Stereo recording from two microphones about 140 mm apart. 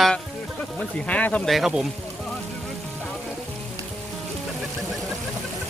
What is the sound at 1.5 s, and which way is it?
Speech, centre (ahead or behind).